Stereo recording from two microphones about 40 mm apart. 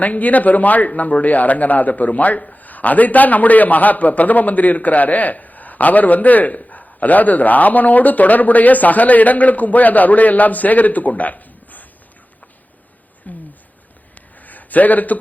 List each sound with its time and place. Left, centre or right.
0.0 s a man's voice: left
13.2 s speech: left
14.2 s a sound: left